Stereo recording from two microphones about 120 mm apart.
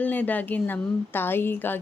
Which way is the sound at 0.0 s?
15° left (ahead or behind).